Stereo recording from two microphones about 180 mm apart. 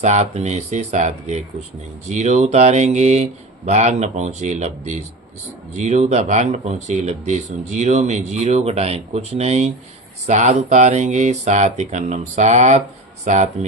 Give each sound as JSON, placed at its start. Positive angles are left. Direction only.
{"t": 0.0, "sound": "speech", "side_deg": -40}